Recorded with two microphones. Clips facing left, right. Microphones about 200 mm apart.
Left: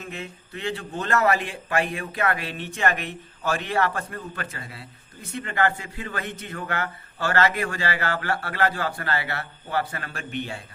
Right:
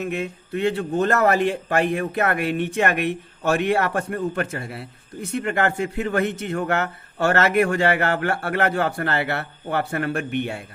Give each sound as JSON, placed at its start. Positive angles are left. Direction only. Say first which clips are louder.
{"t": 0.0, "sound": "a man's voice", "louder": "right 9 dB", "side_deg": -65}
{"t": 7.3, "sound": "a man's voice", "louder": "right 5 dB", "side_deg": -65}